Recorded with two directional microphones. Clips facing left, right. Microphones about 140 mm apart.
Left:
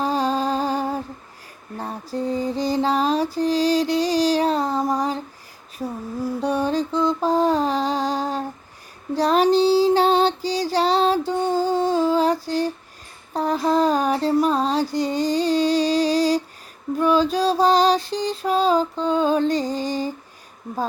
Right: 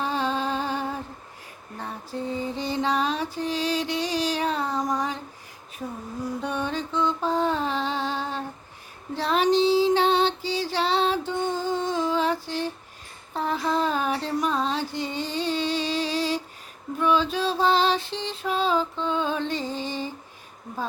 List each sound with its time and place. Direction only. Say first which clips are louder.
0.0 s a sound: left 5 dB; 40° left (ahead or behind)
1.8 s mantra: left 5 dB; 40° left (ahead or behind)
6.2 s mantra: left 7 dB; 35° left (ahead or behind)
9.1 s female singing: left 5 dB; 40° left (ahead or behind)
13.3 s a sound: left 6 dB; 40° left (ahead or behind)
17.0 s music: left 5 dB; 40° left (ahead or behind)